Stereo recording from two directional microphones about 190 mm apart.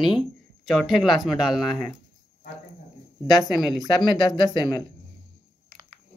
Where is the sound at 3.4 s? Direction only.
Centre (ahead or behind).